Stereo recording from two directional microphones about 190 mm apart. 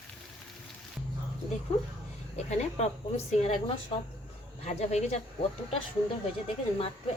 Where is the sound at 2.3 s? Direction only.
35° left (ahead or behind).